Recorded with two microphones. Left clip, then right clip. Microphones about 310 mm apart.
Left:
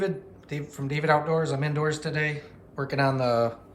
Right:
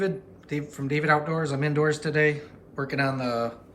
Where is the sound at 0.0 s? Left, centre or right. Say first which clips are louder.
Right 1 dB; centre.